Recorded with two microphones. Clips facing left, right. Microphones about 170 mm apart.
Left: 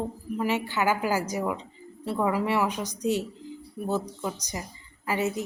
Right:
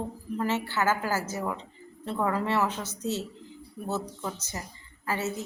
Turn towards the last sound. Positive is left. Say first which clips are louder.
# left 3 dB
turn(degrees=15)  # may be behind; listen again after turning